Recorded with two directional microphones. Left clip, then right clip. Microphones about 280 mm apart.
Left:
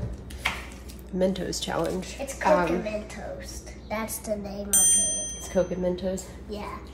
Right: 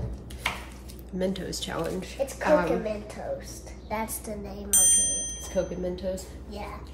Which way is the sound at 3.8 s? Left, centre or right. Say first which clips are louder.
Left 2 dB; centre.